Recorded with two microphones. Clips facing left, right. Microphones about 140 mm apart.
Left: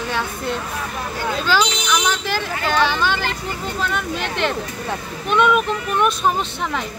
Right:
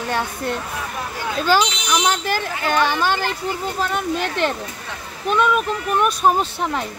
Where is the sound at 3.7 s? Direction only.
40° right (ahead or behind).